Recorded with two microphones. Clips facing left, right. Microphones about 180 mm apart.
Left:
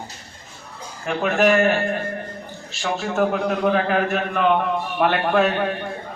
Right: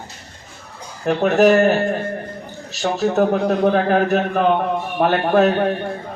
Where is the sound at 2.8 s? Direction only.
40° right (ahead or behind).